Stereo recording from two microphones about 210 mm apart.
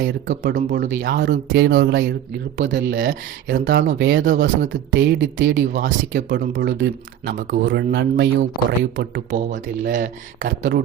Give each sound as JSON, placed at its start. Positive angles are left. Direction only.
{"t": 0.7, "sound": "speech", "side_deg": -40}
{"t": 5.4, "sound": "speech", "side_deg": -45}
{"t": 8.6, "sound": "speech", "side_deg": -35}